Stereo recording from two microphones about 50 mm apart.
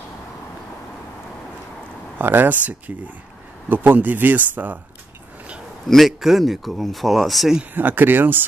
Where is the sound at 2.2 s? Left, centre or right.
Right.